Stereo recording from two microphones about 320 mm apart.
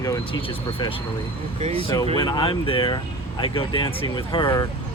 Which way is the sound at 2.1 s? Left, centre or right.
Centre.